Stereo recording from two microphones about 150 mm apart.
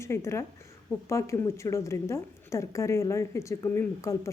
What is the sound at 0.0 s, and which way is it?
A woman's voice, 20° left (ahead or behind).